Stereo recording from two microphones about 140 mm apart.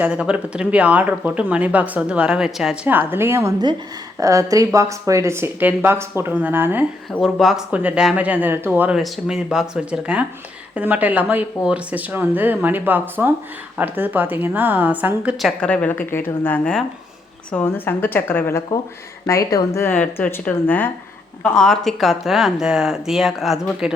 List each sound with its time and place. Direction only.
0.0 s a woman's voice: 5° right (ahead or behind)
2.9 s a woman's voice: 15° right (ahead or behind)
7.2 s a woman's voice: centre (ahead or behind)
9.0 s a woman's voice: centre (ahead or behind)